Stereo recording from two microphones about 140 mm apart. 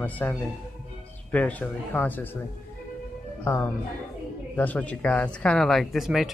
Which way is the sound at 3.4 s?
15° left (ahead or behind).